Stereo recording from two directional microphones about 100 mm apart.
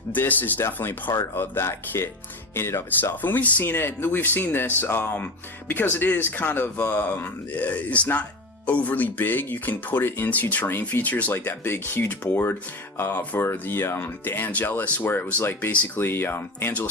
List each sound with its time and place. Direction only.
0.1 s speech: 20° left (ahead or behind)